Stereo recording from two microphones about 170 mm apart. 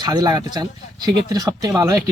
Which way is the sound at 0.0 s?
25° right (ahead or behind).